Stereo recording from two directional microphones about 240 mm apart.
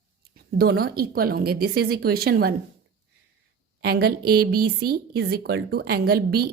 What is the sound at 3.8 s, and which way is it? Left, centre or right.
Speech, right.